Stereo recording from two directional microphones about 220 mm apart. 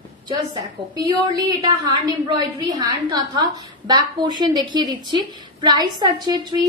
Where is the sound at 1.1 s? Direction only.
15° right (ahead or behind).